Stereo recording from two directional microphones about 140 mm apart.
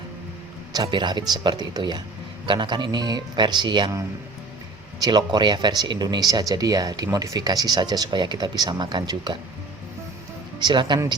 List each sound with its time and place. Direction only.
0.7 s speech: 30° right (ahead or behind)
5.0 s speech: 30° right (ahead or behind)
10.6 s speech: 30° right (ahead or behind)